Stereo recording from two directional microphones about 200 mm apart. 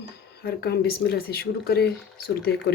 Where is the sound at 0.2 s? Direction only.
50° left (ahead or behind).